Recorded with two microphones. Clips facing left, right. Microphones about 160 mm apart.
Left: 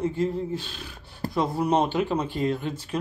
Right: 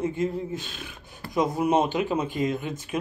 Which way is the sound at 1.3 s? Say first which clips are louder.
Right 1 dB; 15° right (ahead or behind).